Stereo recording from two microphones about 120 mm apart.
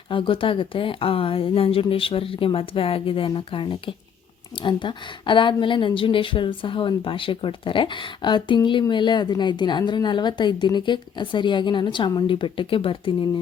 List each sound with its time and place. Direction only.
0.1 s a woman's voice: 45° left (ahead or behind)